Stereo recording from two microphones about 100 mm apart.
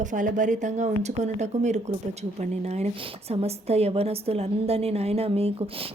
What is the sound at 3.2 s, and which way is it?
A woman's voice, 90° right.